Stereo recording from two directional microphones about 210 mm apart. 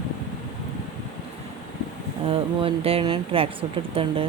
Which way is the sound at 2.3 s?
25° right (ahead or behind).